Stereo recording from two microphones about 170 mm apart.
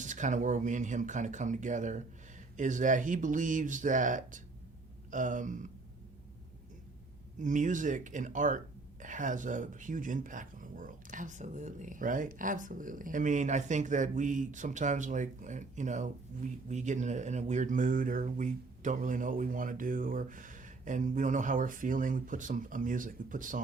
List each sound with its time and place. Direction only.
0.0 s speech: 45° right (ahead or behind)
7.3 s speech: 45° right (ahead or behind)